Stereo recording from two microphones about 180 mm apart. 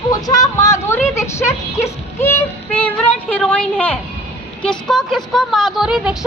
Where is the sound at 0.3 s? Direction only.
20° left (ahead or behind).